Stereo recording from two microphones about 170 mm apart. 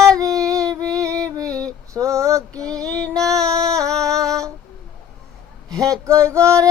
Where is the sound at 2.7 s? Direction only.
20° right (ahead or behind).